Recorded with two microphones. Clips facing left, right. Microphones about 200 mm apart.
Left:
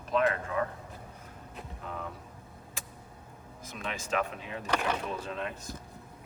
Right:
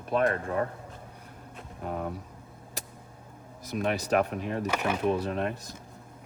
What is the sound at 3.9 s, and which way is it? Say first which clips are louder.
Speech: right 2 dB; 60° right (ahead or behind).